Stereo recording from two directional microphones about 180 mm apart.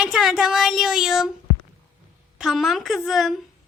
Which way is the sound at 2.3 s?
Centre (ahead or behind).